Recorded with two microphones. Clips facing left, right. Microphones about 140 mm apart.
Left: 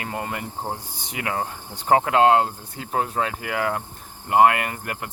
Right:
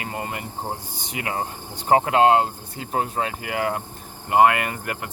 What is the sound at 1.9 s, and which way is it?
Cricket, 20° right (ahead or behind).